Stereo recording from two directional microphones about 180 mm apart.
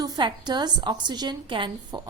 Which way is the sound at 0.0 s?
25° right (ahead or behind).